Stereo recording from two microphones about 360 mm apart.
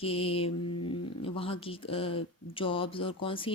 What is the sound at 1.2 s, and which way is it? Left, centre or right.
Speech, centre.